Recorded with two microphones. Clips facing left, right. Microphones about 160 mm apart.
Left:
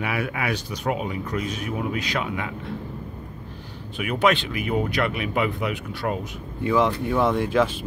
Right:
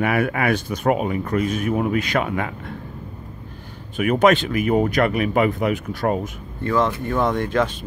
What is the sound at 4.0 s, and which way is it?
Speech, 45° right (ahead or behind).